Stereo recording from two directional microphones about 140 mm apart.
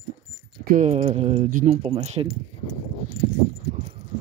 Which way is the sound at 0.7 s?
50° right (ahead or behind).